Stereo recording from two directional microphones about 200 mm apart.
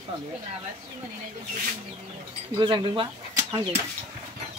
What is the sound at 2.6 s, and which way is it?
Speech, 25° right (ahead or behind).